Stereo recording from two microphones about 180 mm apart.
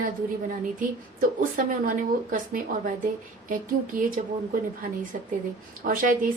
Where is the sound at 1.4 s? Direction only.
50° right (ahead or behind).